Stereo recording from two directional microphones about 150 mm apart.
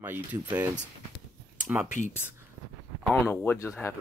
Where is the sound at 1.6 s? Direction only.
10° right (ahead or behind).